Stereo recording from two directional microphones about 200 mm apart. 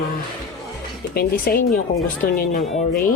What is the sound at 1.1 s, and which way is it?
Speech, 50° left (ahead or behind).